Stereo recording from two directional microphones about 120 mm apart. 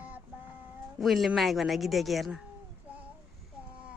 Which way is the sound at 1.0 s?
Centre (ahead or behind).